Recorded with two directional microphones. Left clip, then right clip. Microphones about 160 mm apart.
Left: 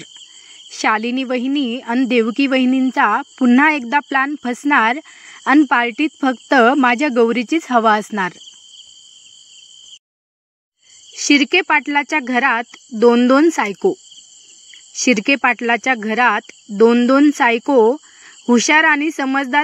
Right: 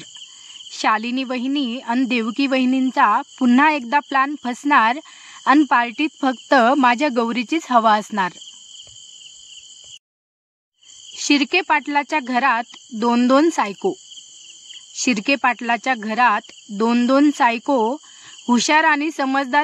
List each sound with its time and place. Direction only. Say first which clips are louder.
0.7 s speech: left 2 dB; 20° left (ahead or behind)
11.2 s speech: left 4 dB; 15° left (ahead or behind)
15.0 s speech: left 4 dB; 20° left (ahead or behind)